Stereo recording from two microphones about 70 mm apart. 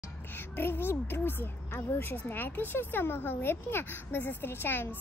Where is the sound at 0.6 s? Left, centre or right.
Left.